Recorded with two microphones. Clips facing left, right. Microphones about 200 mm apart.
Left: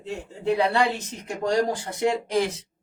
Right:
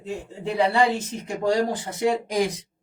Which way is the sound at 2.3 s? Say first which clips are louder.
Even; 15° right (ahead or behind).